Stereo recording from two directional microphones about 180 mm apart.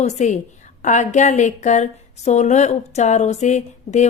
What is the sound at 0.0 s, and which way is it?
Speech, 40° left (ahead or behind).